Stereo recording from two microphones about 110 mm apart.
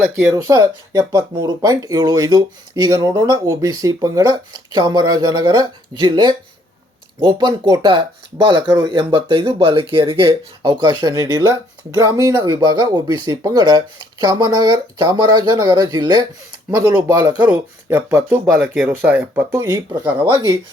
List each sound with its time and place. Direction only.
0.0 s speech: 30° right (ahead or behind)
17.3 s speech: 10° right (ahead or behind)
17.8 s speech: 25° right (ahead or behind)
19.6 s speech: 35° right (ahead or behind)
20.1 s speech: 20° right (ahead or behind)